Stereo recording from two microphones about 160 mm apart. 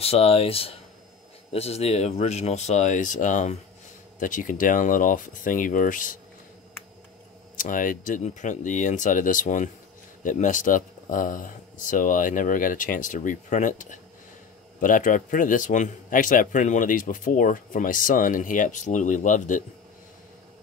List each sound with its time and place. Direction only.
0.0 s a man's voice: 40° left (ahead or behind); by 6.1 s 55° left (ahead or behind)
7.5 s a man's voice: 55° left (ahead or behind)